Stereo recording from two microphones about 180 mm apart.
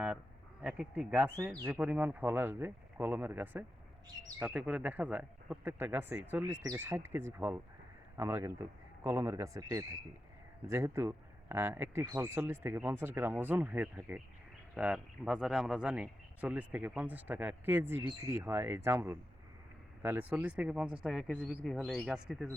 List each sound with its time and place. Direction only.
0.6 s speech: 5° right (ahead or behind)